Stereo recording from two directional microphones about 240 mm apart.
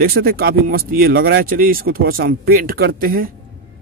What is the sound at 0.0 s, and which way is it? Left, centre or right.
Speech, right.